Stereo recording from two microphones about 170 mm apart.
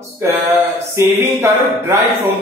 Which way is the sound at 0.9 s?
15° right (ahead or behind).